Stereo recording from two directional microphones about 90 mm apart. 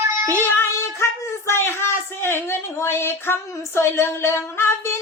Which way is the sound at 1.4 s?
30° left (ahead or behind).